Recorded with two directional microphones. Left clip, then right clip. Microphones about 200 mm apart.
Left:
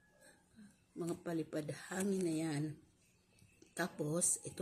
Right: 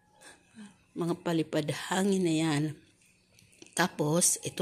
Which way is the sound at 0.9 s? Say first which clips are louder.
Right 10 dB; 20° right (ahead or behind).